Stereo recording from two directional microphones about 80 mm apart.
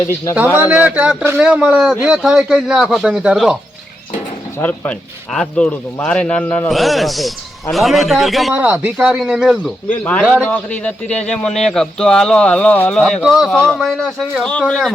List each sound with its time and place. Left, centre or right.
0.3 s a man's voice: right
2.2 s a man's voice: centre
4.6 s speech: left
5.3 s speech: centre
6.7 s a man's voice: centre
8.5 s speech: right
9.0 s a man's voice: centre
9.9 s speech: centre
12.9 s a man's voice: centre